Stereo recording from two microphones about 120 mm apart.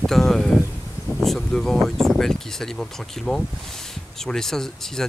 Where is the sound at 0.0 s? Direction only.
5° left (ahead or behind).